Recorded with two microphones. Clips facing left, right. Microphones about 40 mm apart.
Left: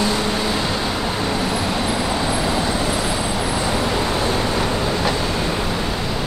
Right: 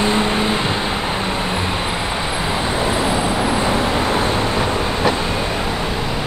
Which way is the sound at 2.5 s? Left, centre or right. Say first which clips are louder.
Right 1 dB; right.